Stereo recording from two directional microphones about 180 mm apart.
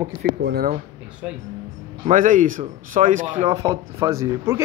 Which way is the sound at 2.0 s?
45° right (ahead or behind).